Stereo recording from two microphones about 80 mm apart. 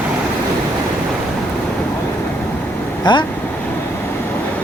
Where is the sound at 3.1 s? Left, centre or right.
Left.